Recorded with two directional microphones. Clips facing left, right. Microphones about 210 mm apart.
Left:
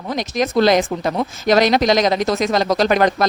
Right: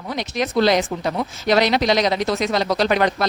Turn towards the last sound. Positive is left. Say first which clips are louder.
# left 3 dB
turn(degrees=45)  # may be behind; listen again after turning